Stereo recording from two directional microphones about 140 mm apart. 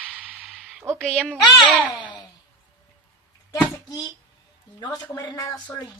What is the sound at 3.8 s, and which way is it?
Speech, 30° left (ahead or behind).